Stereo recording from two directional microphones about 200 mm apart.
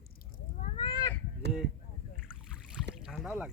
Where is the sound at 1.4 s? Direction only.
55° right (ahead or behind).